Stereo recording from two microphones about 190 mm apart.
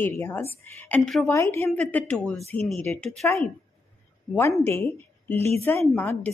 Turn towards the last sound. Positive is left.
turn(degrees=10)  # may be behind; listen again after turning